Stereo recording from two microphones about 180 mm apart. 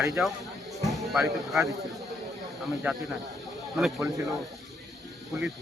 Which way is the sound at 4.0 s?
20° right (ahead or behind).